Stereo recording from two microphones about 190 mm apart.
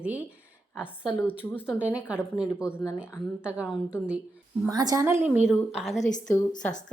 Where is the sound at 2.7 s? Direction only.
10° left (ahead or behind).